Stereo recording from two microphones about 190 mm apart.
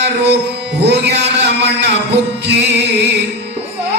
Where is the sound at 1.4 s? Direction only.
65° right (ahead or behind).